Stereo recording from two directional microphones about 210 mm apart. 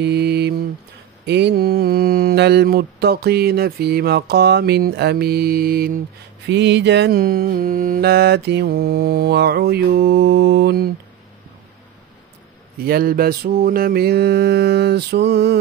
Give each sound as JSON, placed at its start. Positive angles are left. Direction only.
{"t": 0.0, "sound": "mantra", "side_deg": -50}
{"t": 6.4, "sound": "mantra", "side_deg": -55}
{"t": 12.8, "sound": "mantra", "side_deg": -45}